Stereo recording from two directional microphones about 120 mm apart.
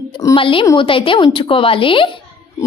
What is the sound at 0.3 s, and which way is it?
A woman's voice, 45° left (ahead or behind).